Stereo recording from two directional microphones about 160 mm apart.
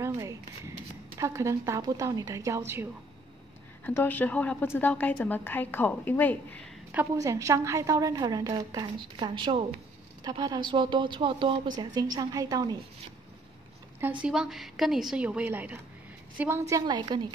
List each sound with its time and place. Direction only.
0.0 s speech: 20° right (ahead or behind)
3.8 s a woman's voice: 10° left (ahead or behind)
6.9 s a woman's voice: 15° right (ahead or behind)
14.2 s a woman's voice: 5° right (ahead or behind); by 17.3 s 30° right (ahead or behind)